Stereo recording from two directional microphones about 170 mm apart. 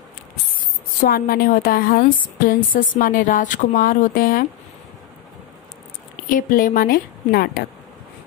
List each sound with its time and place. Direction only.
1.0 s a woman's voice: 60° left (ahead or behind)
6.2 s a woman's voice: 55° left (ahead or behind)